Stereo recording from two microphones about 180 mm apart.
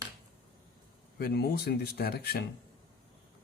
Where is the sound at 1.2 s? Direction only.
60° left (ahead or behind).